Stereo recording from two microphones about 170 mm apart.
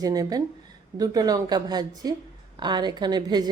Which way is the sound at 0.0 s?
20° right (ahead or behind).